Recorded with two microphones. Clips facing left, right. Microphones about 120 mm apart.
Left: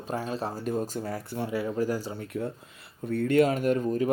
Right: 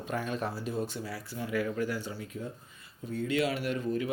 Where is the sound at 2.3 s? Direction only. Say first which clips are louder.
Left 9 dB; 70° left (ahead or behind).